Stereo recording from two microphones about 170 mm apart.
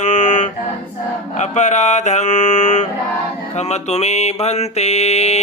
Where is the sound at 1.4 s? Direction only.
45° left (ahead or behind).